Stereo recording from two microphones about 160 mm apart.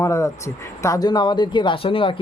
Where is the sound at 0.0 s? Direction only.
20° left (ahead or behind).